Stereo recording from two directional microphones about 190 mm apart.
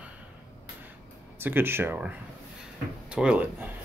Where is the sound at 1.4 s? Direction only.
10° right (ahead or behind).